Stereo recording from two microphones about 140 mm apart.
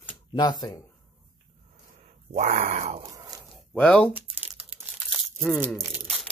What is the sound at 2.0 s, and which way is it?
Speech, 60° right (ahead or behind).